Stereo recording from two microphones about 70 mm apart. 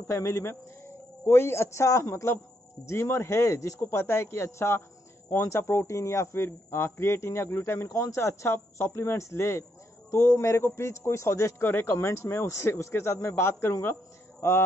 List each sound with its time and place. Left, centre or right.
0.1 s a man's voice: left
3.8 s a man's voice: left
11.6 s a man's voice: left